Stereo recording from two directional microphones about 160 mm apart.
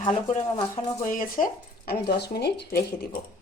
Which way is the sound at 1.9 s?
80° left.